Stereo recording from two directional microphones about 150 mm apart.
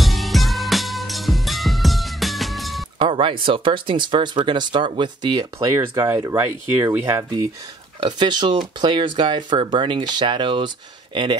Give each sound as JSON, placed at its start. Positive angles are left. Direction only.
{"t": 0.0, "sound": "music", "side_deg": 0}
{"t": 3.0, "sound": "speech", "side_deg": -35}
{"t": 5.7, "sound": "speech", "side_deg": -15}